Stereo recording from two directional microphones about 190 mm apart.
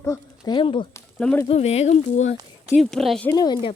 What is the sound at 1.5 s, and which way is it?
Speech, 35° left (ahead or behind).